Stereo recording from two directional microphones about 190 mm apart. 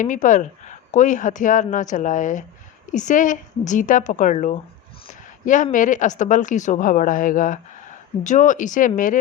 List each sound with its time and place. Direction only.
0.0 s a woman's voice: 40° left (ahead or behind)
5.7 s speech: 40° left (ahead or behind)